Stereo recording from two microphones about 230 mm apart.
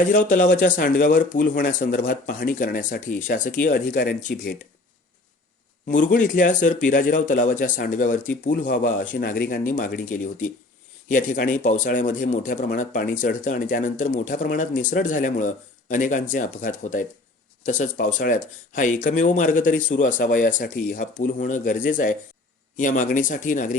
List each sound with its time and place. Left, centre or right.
0.0 s speech: left
5.9 s speech: left